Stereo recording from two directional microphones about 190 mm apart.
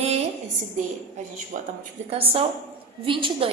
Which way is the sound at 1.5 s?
45° right (ahead or behind).